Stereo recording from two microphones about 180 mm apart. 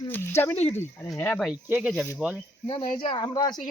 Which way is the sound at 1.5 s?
10° right (ahead or behind).